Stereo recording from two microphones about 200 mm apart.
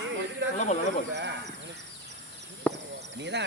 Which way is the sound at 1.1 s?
60° right (ahead or behind).